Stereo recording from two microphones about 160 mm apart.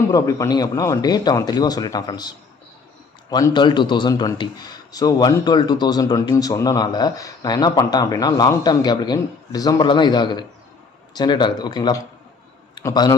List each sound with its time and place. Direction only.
0.1 s a man's voice: 20° left (ahead or behind)